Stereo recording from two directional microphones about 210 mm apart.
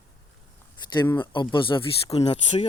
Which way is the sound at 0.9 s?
20° left (ahead or behind).